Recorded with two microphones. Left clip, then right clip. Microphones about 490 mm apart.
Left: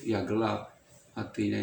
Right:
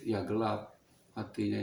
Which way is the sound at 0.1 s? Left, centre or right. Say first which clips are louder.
Left 3 dB; right.